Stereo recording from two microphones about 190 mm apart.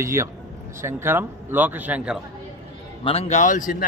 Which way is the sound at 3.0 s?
35° left (ahead or behind).